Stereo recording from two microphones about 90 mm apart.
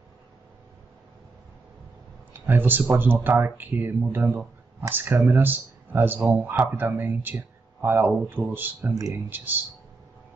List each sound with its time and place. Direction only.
2.3 s speech: 20° right (ahead or behind)